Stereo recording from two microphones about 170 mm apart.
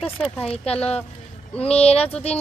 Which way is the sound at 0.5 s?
35° left (ahead or behind).